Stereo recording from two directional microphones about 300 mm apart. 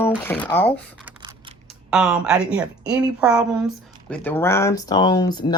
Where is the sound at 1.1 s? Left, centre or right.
Centre.